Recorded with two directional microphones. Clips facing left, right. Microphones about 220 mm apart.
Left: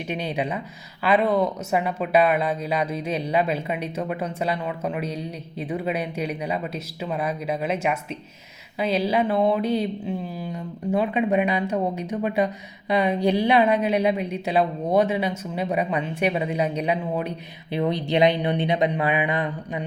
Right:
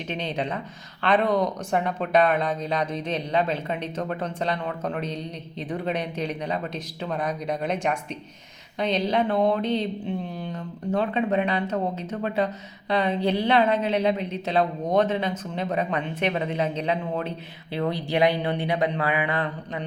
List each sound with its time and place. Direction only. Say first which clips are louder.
0.1 s speech: left 2 dB; 10° left (ahead or behind)